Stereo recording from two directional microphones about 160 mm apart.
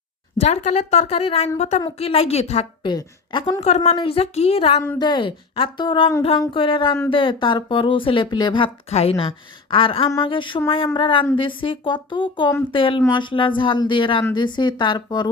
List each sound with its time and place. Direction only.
0.3 s a woman's voice: 45° left (ahead or behind)
2.8 s speech: 25° left (ahead or behind)